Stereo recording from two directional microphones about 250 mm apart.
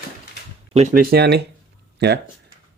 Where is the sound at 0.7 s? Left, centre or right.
Right.